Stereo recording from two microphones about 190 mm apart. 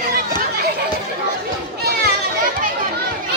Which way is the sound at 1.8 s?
55° right (ahead or behind).